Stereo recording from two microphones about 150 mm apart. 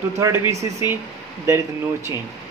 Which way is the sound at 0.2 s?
20° right (ahead or behind).